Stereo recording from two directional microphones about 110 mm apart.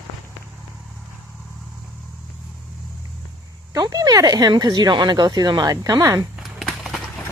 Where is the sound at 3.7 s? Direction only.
35° right (ahead or behind).